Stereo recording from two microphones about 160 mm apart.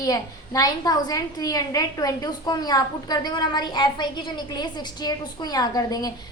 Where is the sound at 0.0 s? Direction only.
20° left (ahead or behind).